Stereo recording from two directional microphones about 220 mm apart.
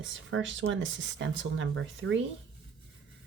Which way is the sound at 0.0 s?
60° right (ahead or behind).